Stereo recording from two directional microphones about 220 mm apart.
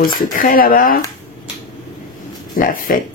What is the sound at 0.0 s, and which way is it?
Speech, 40° left (ahead or behind).